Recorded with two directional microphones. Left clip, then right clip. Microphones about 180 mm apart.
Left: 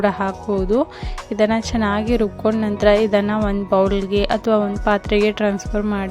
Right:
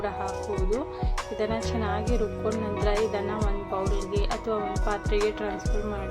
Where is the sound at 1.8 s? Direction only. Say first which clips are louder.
Left 9 dB; 50° left (ahead or behind).